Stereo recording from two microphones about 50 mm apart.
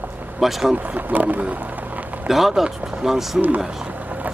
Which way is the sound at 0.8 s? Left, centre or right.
Right.